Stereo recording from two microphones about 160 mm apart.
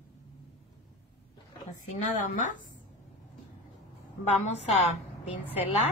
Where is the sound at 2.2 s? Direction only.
55° left (ahead or behind).